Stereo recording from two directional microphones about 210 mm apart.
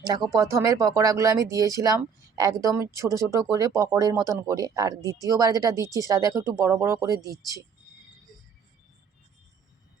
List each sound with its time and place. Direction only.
0.3 s speech: 15° right (ahead or behind)